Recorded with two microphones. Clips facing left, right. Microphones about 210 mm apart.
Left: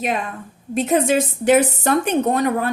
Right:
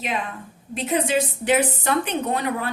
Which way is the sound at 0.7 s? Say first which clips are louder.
Left 5 dB; 45° left (ahead or behind).